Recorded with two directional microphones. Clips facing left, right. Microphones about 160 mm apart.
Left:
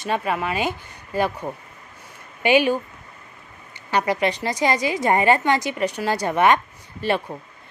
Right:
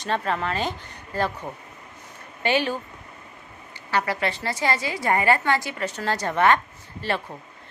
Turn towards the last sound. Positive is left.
turn(degrees=15)  # may be behind; listen again after turning